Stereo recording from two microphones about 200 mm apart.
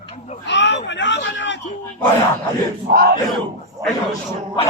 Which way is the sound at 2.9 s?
50° right (ahead or behind).